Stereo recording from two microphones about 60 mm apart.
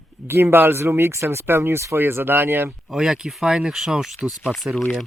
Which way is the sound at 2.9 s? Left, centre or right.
Centre.